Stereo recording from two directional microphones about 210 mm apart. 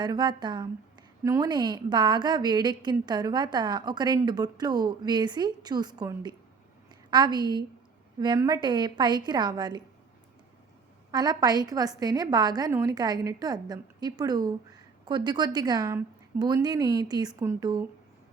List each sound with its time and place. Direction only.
0.0 s a woman's voice: 20° right (ahead or behind)
11.1 s a woman's voice: 20° right (ahead or behind)